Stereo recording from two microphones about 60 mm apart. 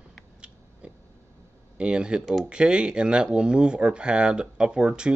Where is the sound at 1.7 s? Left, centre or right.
Centre.